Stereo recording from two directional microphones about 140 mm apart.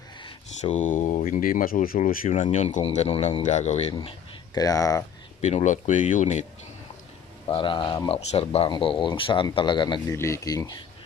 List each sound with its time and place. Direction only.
0.6 s speech: 60° left (ahead or behind)
4.5 s speech: 25° left (ahead or behind)
5.4 s speech: 55° left (ahead or behind)
7.4 s speech: 35° left (ahead or behind)
10.2 s speech: 20° left (ahead or behind)